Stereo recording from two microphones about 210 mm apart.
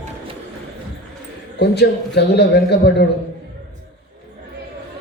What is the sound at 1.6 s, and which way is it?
A man's voice, 55° left (ahead or behind).